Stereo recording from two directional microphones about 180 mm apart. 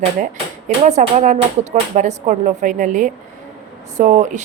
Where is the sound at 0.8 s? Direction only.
45° right (ahead or behind).